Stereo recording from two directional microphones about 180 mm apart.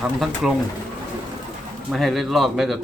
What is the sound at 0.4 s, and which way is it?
Speech, 5° right (ahead or behind).